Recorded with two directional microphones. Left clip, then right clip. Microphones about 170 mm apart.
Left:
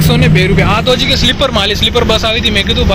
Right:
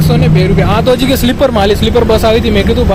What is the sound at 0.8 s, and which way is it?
Speech, 45° right (ahead or behind).